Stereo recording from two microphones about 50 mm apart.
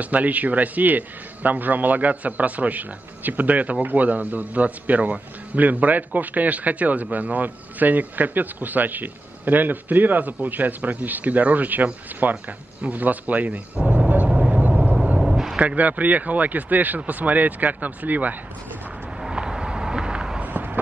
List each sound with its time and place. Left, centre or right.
0.0 s a man's voice: right
13.8 s vehicle: right
15.1 s a sound: centre
15.6 s a man's voice: right
19.2 s vehicle: centre
20.4 s fireworks: right